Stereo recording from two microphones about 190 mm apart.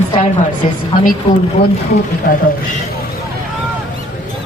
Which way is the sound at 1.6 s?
55° left (ahead or behind).